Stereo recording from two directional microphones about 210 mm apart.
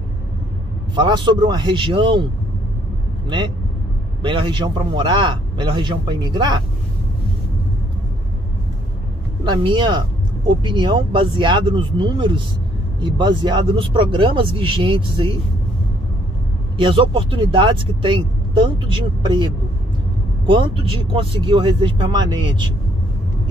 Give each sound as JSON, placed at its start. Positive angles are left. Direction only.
{"t": 0.9, "sound": "speech", "side_deg": -20}
{"t": 3.3, "sound": "speech", "side_deg": -20}
{"t": 9.4, "sound": "speech", "side_deg": -20}
{"t": 16.7, "sound": "speech", "side_deg": -25}